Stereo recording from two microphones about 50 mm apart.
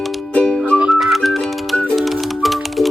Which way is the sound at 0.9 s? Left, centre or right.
Centre.